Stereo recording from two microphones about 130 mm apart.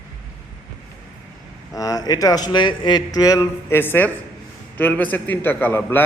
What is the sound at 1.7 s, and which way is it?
Speech, 25° left (ahead or behind).